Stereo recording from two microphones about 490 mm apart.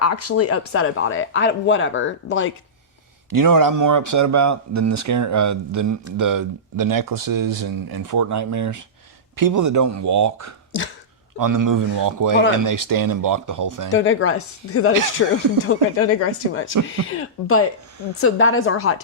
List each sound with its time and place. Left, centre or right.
0.0 s speech: left
3.2 s speech: right
13.9 s speech: left